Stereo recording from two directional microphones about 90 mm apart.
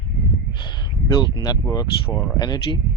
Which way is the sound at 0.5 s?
55° left (ahead or behind).